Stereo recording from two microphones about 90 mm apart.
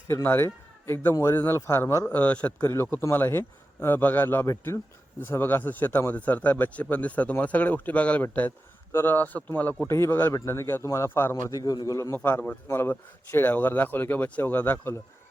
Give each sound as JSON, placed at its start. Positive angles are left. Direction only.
{"t": 0.1, "sound": "a man's voice", "side_deg": 25}
{"t": 2.0, "sound": "a man's voice", "side_deg": 15}
{"t": 2.6, "sound": "a man's voice", "side_deg": 25}
{"t": 9.8, "sound": "a man's voice", "side_deg": 30}
{"t": 12.1, "sound": "a man's voice", "side_deg": 20}